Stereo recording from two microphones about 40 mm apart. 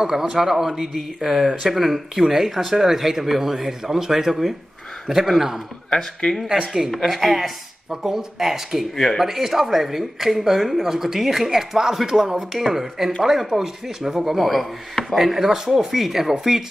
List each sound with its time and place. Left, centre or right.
0.0 s speech: centre
5.9 s speech: centre
6.3 s speech: centre
8.9 s speech: centre
9.2 s speech: centre